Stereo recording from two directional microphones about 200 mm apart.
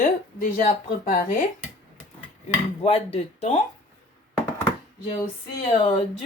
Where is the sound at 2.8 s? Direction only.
30° left (ahead or behind).